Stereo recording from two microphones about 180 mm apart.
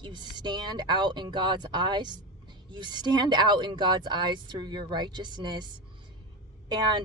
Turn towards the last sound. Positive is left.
turn(degrees=-25)  # may be behind; listen again after turning